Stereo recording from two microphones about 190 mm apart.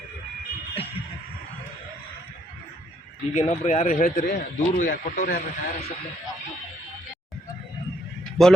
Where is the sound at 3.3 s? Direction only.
40° left (ahead or behind).